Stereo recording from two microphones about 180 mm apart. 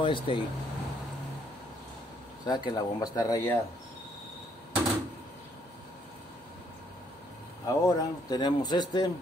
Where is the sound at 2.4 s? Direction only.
20° left (ahead or behind).